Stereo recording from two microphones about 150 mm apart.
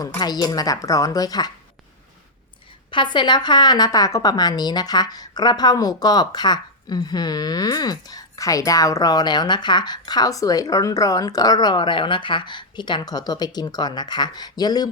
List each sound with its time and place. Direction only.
0.2 s a woman's voice: 25° left (ahead or behind)
2.9 s a woman's voice: 30° left (ahead or behind)